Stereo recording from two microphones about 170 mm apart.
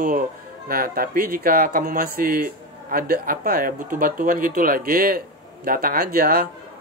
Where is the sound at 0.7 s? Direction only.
60° right (ahead or behind).